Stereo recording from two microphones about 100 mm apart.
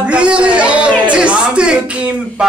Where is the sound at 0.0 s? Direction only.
10° right (ahead or behind).